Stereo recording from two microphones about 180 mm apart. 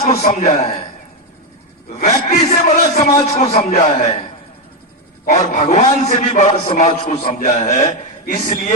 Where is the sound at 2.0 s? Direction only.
40° left (ahead or behind).